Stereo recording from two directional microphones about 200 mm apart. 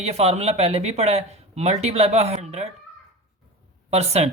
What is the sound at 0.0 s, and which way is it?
Speech, 30° right (ahead or behind).